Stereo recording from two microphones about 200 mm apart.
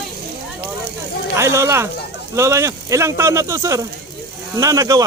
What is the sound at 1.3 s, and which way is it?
Speech, 15° right (ahead or behind).